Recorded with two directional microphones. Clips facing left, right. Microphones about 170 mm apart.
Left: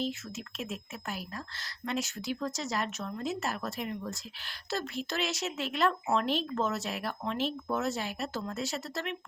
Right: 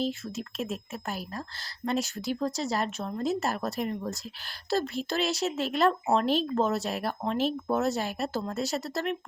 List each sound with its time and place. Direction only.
0.0 s speech: 35° right (ahead or behind)